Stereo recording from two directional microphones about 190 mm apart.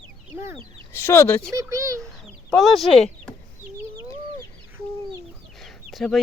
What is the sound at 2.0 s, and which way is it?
Chicken, centre (ahead or behind).